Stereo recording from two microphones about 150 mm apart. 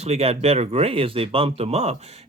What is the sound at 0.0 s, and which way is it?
Speech, 45° right (ahead or behind).